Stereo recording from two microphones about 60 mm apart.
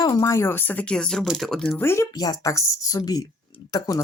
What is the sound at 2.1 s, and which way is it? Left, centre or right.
A woman's voice, left.